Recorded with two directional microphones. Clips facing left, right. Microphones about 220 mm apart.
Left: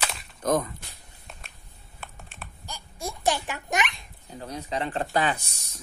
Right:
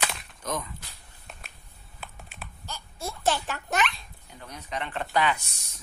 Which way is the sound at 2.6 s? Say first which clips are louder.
Left 1 dB; 15° left (ahead or behind).